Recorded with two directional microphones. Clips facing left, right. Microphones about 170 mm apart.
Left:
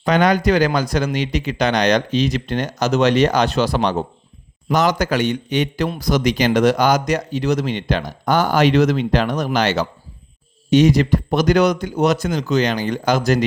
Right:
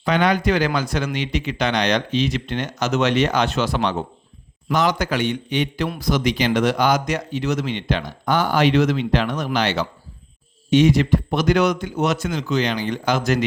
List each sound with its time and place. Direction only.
0.0 s a man's voice: 40° left (ahead or behind)